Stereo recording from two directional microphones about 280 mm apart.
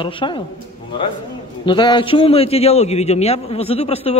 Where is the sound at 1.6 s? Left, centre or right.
Centre.